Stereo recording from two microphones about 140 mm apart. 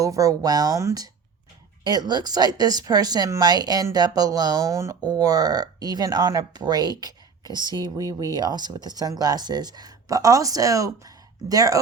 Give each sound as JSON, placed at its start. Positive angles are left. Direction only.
{"t": 0.0, "sound": "speech", "side_deg": -25}